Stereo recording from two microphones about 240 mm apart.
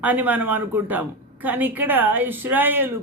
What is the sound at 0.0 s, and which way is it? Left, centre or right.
Speech, centre.